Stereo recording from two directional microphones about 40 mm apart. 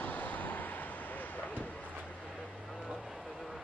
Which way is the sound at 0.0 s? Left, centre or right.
Left.